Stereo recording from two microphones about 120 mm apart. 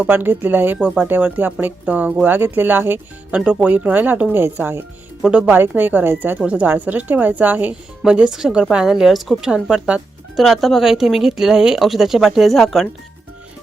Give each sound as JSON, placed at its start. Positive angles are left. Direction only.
{"t": 0.0, "sound": "speech", "side_deg": -15}